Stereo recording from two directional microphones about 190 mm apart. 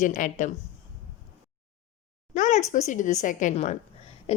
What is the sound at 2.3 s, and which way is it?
A woman's voice, 40° left (ahead or behind).